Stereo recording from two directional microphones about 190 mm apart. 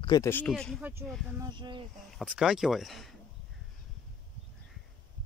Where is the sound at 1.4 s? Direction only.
25° right (ahead or behind).